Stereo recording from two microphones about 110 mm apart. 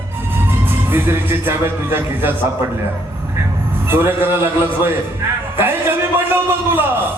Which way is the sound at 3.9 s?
20° right (ahead or behind).